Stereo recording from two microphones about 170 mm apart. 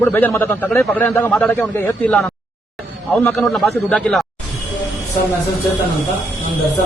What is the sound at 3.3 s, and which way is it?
Speech, centre (ahead or behind).